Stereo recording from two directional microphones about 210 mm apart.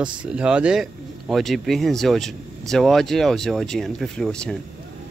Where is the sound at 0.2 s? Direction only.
5° right (ahead or behind).